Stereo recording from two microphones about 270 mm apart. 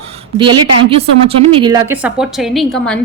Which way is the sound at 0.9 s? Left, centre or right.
Right.